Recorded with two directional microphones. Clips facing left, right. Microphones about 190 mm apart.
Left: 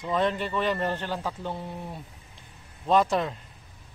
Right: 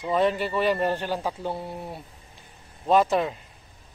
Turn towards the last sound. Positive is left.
turn(degrees=-5)  # may be behind; listen again after turning